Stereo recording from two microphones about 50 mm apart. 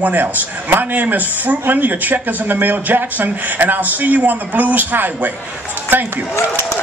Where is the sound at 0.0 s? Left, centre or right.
Right.